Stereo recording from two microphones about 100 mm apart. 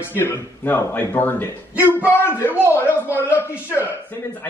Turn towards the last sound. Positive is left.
turn(degrees=20)  # may be behind; listen again after turning